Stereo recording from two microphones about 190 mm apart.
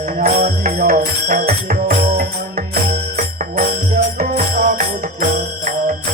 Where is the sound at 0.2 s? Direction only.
50° right (ahead or behind).